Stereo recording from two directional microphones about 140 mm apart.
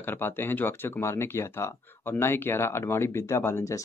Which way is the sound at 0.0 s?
15° left (ahead or behind).